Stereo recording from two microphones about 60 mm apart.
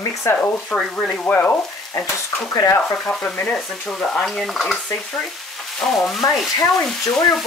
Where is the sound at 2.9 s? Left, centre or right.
Centre.